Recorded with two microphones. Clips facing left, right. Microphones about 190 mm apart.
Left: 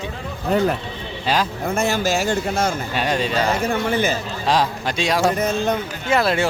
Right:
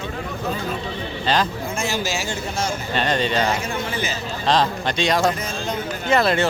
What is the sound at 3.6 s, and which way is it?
Speech, 55° left (ahead or behind).